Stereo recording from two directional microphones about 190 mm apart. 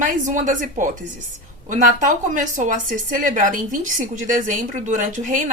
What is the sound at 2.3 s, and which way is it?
A woman's voice, 40° right (ahead or behind).